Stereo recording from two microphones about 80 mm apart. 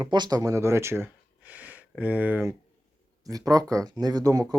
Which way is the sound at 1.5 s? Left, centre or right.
Centre.